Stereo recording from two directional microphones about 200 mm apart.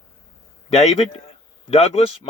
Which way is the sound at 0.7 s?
35° left (ahead or behind).